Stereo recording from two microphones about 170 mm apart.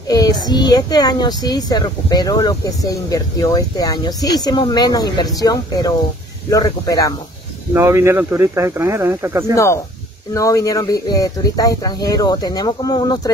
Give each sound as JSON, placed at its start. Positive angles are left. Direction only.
{"t": 0.1, "sound": "speech", "side_deg": 20}
{"t": 7.7, "sound": "speech", "side_deg": -15}
{"t": 10.3, "sound": "speech", "side_deg": 20}